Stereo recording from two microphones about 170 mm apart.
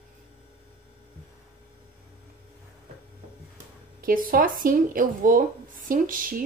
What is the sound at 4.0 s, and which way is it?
Speech, 55° right (ahead or behind).